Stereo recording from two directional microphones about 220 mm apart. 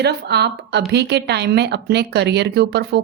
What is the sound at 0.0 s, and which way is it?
A woman's voice, 50° right (ahead or behind).